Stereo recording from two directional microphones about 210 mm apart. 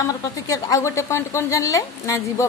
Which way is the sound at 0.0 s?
15° left (ahead or behind).